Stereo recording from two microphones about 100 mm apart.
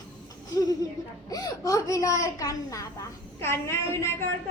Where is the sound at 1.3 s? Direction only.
35° left (ahead or behind).